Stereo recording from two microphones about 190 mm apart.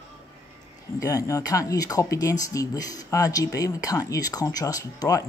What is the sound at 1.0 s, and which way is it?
Speech, 15° left (ahead or behind).